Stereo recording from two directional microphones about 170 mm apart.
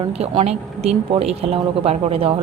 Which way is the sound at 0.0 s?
35° right (ahead or behind).